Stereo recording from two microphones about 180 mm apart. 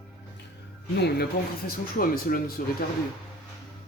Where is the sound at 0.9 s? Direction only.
65° left (ahead or behind).